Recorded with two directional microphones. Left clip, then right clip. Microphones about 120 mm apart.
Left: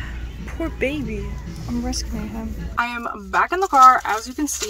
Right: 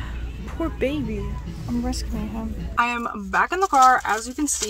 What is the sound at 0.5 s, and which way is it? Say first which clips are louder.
A woman's voice: left 1 dB; 10° right (ahead or behind).